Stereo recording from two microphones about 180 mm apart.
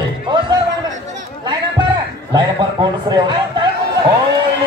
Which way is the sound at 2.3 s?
25° right (ahead or behind).